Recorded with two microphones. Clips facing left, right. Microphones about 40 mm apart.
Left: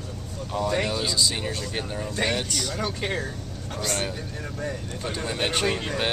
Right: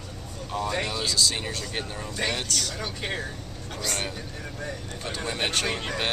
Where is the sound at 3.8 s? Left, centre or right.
Centre.